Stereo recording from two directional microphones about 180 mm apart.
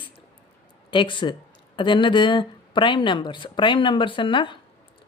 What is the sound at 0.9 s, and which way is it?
Speech, 25° left (ahead or behind).